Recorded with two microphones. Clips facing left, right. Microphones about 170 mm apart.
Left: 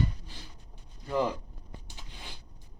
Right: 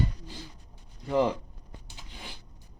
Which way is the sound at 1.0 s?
20° right (ahead or behind).